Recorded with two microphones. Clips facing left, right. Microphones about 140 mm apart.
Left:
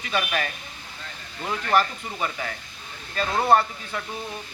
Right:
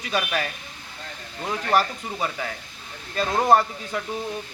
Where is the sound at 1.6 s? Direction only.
35° right (ahead or behind).